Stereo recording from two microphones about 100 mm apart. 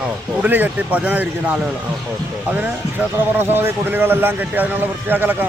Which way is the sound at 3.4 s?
20° right (ahead or behind).